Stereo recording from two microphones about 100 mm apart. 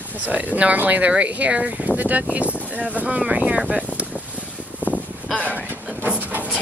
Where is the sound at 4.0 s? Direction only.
15° right (ahead or behind).